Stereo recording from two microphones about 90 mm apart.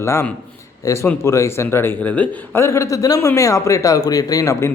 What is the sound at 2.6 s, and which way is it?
Speech, 35° left (ahead or behind).